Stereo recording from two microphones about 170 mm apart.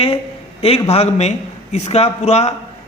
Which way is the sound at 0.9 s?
40° left (ahead or behind).